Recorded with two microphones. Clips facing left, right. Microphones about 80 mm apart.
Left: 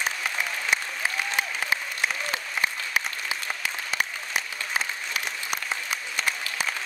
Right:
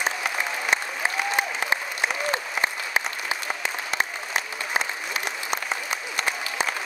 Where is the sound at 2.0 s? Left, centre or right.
Right.